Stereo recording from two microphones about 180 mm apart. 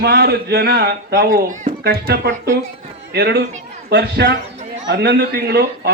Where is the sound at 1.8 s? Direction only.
60° right (ahead or behind).